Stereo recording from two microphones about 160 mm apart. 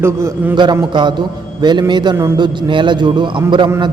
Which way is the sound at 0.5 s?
25° right (ahead or behind).